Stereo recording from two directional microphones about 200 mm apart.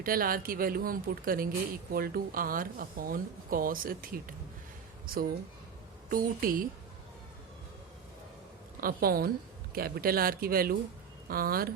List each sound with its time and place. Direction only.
0.0 s speech: 45° right (ahead or behind)
8.8 s speech: 45° right (ahead or behind)